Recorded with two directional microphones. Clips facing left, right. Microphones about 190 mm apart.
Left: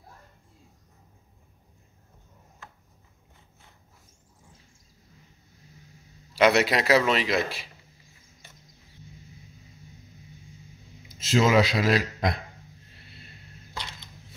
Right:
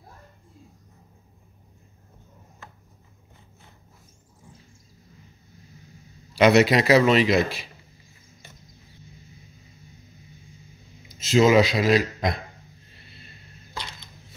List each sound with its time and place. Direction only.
6.3 s a man's voice: centre (ahead or behind)
11.3 s a man's voice: centre (ahead or behind)